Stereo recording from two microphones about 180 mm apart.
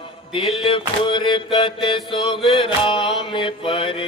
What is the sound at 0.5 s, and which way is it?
Music, 30° left (ahead or behind).